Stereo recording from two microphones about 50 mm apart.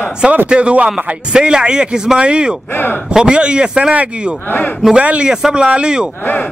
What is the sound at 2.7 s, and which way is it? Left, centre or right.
Speech, left.